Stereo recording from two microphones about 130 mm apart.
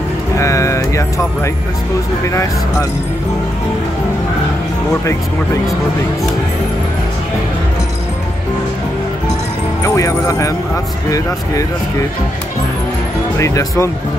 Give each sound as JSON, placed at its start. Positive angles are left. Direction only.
{"t": 0.4, "sound": "music", "side_deg": 25}
{"t": 2.2, "sound": "speech", "side_deg": 20}
{"t": 9.8, "sound": "speech", "side_deg": 25}
{"t": 13.4, "sound": "speech", "side_deg": 25}